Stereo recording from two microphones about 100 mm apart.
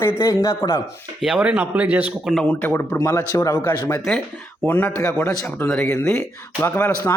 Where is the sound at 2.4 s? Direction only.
20° left (ahead or behind).